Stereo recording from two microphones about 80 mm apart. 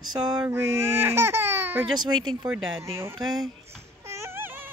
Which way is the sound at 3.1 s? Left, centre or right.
Right.